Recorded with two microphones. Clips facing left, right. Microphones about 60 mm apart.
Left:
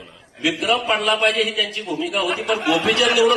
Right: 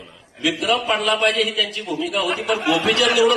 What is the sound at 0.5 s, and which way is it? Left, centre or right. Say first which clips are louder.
A man's voice: even; left.